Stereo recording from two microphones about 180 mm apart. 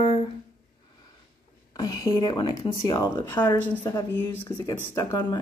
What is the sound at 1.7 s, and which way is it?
Speech, 20° left (ahead or behind).